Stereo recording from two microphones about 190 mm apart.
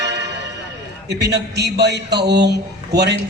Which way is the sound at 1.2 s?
60° right (ahead or behind).